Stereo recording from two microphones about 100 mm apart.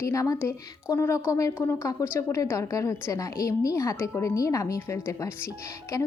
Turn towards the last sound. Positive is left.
turn(degrees=35)  # may be behind; listen again after turning